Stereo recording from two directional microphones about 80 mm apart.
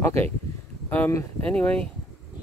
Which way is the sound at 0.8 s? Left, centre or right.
Left.